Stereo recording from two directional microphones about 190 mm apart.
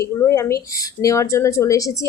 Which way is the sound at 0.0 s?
15° left (ahead or behind).